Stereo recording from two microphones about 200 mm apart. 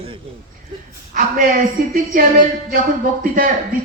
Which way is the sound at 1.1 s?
45° right (ahead or behind).